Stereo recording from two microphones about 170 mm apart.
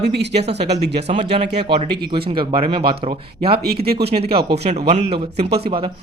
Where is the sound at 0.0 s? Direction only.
90° right.